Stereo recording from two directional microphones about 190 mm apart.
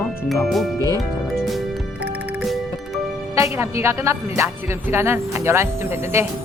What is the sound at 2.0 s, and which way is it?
Music, 5° right (ahead or behind).